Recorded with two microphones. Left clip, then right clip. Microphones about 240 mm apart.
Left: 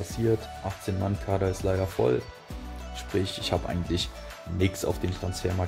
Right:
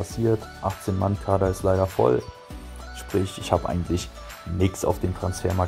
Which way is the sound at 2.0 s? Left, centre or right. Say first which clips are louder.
Right 4 dB; centre.